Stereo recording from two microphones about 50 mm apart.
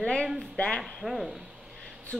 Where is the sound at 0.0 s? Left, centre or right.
Centre.